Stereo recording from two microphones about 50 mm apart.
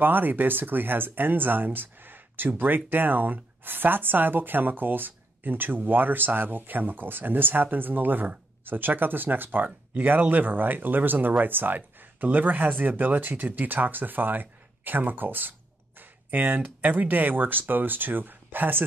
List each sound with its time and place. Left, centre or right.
0.0 s speech: right